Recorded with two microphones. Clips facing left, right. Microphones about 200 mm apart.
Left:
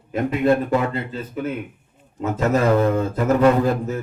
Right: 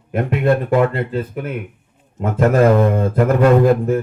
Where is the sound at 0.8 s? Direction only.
55° right (ahead or behind).